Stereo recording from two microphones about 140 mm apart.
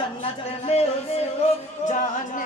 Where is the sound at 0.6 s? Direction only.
50° left (ahead or behind).